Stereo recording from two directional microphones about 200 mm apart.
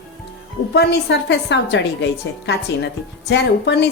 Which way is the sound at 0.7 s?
55° left (ahead or behind).